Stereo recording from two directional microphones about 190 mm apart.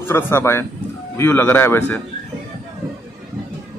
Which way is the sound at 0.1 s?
10° left (ahead or behind).